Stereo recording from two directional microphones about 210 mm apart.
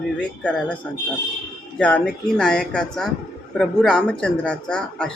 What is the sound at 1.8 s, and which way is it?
Speech, 5° left (ahead or behind).